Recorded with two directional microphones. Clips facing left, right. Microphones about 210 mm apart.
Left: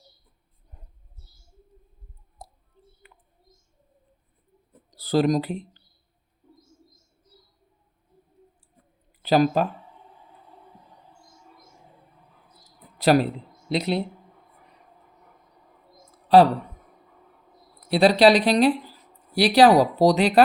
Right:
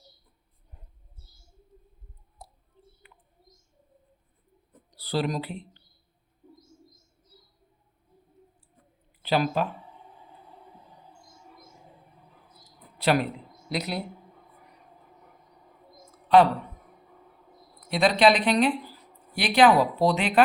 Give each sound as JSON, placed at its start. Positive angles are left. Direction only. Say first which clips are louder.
{"t": 2.4, "sound": "a sound", "louder": "left 4 dB", "side_deg": 45}
{"t": 3.0, "sound": "bird", "louder": "left 2 dB", "side_deg": 45}
{"t": 4.9, "sound": "speech", "louder": "left 7 dB", "side_deg": 45}
{"t": 9.2, "sound": "speech", "louder": "left 6 dB", "side_deg": 40}
{"t": 13.0, "sound": "speech", "louder": "left 5 dB", "side_deg": 35}
{"t": 16.3, "sound": "speech", "louder": "left 3 dB", "side_deg": 35}
{"t": 17.8, "sound": "speech", "louder": "left 4 dB", "side_deg": 35}